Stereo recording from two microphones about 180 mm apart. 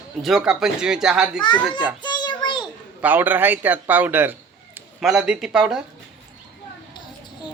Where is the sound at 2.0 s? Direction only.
25° left (ahead or behind).